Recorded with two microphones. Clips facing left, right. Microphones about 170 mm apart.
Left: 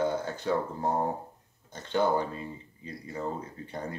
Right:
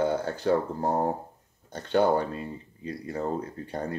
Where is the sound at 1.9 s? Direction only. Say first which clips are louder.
Right 4 dB; 60° right (ahead or behind).